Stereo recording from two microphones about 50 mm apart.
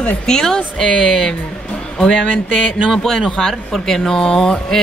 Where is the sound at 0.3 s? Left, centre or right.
Centre.